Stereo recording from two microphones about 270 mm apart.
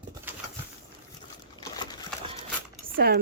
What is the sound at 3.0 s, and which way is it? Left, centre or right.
Chopping, right.